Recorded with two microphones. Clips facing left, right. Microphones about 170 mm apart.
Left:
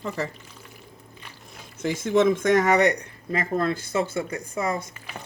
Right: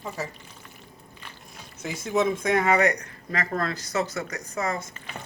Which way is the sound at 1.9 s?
50° left (ahead or behind).